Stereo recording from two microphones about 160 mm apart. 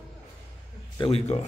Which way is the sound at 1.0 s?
40° left (ahead or behind).